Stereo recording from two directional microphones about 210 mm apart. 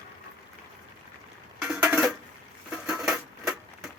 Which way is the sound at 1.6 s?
5° right (ahead or behind).